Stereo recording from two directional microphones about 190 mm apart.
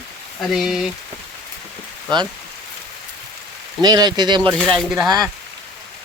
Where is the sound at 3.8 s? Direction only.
20° right (ahead or behind).